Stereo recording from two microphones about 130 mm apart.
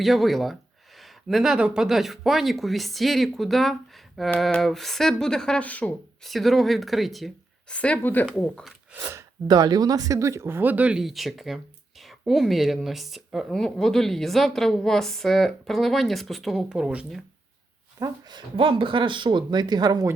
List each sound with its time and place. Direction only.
0.0 s speech: centre (ahead or behind)
6.2 s speech: centre (ahead or behind)
8.9 s speech: 15° right (ahead or behind)
18.0 s speech: 35° right (ahead or behind)